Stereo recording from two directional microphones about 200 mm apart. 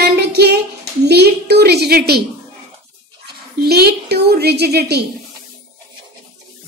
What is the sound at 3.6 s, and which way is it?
A woman's voice, 55° right (ahead or behind).